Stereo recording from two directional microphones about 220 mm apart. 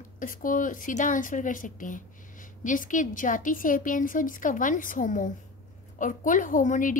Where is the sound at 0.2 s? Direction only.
40° left (ahead or behind).